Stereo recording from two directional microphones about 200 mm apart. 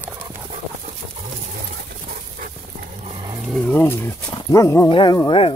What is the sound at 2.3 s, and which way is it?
Dog, 45° right (ahead or behind).